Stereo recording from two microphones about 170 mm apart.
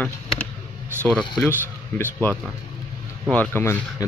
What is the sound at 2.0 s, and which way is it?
Speech, 10° left (ahead or behind).